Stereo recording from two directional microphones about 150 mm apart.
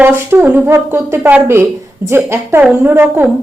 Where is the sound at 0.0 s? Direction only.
15° right (ahead or behind).